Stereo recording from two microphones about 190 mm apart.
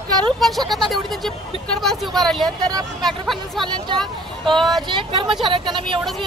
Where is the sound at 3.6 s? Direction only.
25° right (ahead or behind).